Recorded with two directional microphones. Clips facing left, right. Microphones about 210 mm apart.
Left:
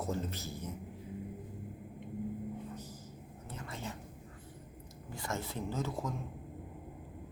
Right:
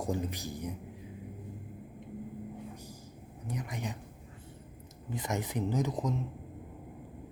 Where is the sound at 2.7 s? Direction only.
10° right (ahead or behind).